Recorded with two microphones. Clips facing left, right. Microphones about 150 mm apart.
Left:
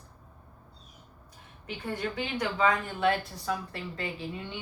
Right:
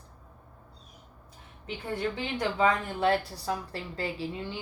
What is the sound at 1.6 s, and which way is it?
Speech, 30° right (ahead or behind).